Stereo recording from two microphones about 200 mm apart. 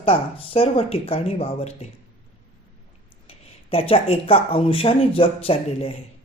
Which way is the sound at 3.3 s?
30° left (ahead or behind).